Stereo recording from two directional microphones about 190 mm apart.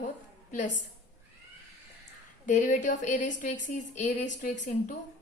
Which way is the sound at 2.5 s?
40° left (ahead or behind).